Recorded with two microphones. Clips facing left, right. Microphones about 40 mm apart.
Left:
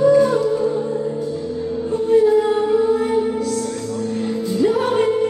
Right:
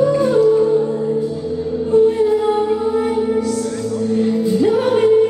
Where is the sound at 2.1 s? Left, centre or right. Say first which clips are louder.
Left 1 dB; centre.